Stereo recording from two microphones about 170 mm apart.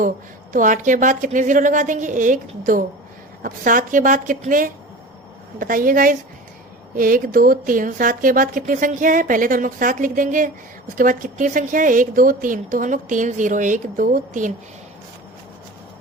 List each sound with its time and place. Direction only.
0.5 s a woman's voice: 50° right (ahead or behind)